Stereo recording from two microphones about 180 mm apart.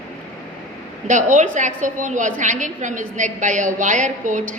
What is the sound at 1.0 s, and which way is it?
A woman's voice, 45° right (ahead or behind).